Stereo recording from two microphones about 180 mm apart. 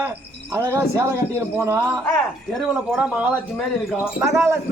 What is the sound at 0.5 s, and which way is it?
A man's voice, 10° right (ahead or behind).